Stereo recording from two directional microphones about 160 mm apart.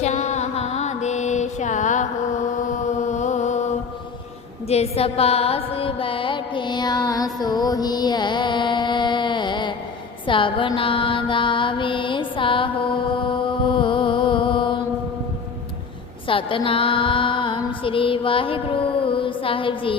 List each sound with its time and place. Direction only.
0.0 s mantra: 45° left (ahead or behind)
16.2 s music: 35° left (ahead or behind)